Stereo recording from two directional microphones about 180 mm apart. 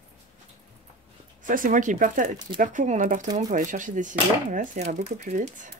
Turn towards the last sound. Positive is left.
turn(degrees=-45)  # may be behind; listen again after turning